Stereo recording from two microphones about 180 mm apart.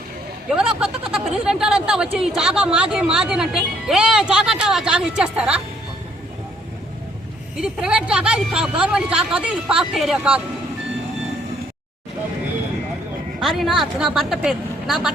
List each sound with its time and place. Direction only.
0.5 s speech: 5° right (ahead or behind)
7.5 s speech: 5° right (ahead or behind)
13.4 s speech: centre (ahead or behind)